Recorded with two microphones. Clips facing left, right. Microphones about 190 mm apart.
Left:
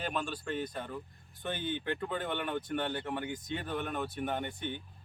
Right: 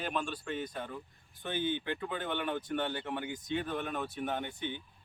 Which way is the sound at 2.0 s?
Centre (ahead or behind).